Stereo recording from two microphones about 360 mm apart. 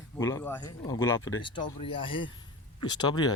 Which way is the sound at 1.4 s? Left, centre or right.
Centre.